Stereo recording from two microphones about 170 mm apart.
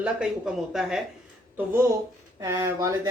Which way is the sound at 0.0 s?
5° right (ahead or behind).